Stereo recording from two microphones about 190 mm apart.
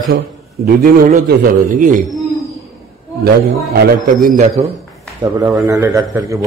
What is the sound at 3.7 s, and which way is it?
A man's voice, 45° right (ahead or behind).